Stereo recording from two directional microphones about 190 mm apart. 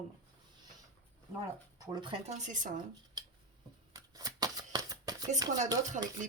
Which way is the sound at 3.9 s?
20° right (ahead or behind).